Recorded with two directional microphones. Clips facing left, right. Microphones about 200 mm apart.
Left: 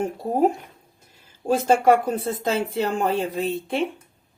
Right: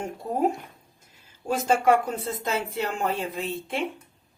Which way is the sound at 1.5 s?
35° left (ahead or behind).